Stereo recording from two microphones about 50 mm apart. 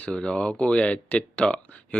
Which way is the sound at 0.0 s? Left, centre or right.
Centre.